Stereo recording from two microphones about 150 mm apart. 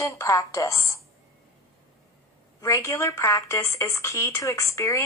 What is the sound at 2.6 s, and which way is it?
A woman's voice, 20° left (ahead or behind).